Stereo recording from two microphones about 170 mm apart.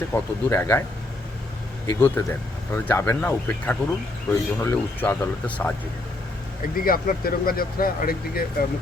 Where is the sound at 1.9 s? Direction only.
15° left (ahead or behind).